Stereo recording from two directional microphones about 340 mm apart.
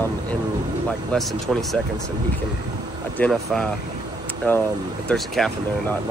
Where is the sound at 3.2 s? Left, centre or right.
Centre.